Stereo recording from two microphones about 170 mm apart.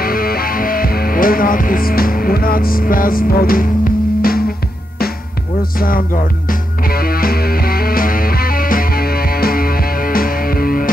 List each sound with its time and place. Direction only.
0.0 s music: 60° left (ahead or behind)
5.8 s music: 60° left (ahead or behind)